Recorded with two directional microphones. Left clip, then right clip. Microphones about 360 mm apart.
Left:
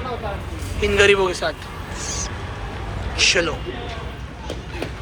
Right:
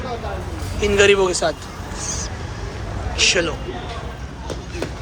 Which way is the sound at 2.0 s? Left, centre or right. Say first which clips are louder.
Even; centre.